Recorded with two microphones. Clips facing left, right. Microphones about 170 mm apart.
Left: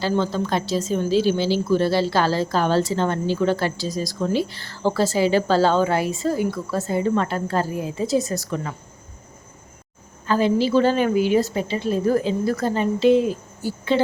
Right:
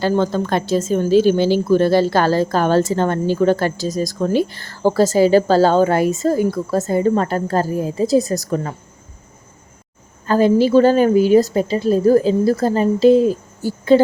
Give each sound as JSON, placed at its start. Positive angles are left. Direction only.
{"t": 0.0, "sound": "a woman's voice", "side_deg": -50}
{"t": 10.2, "sound": "a woman's voice", "side_deg": -45}